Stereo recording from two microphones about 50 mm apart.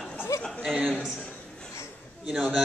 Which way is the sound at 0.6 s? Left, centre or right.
Centre.